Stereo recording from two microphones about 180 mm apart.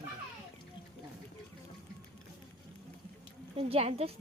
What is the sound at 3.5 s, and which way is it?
Speech, 35° right (ahead or behind).